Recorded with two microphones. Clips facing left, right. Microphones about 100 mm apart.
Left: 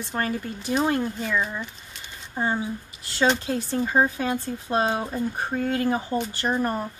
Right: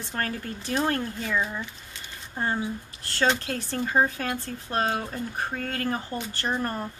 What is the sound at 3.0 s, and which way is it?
Speech, 10° left (ahead or behind).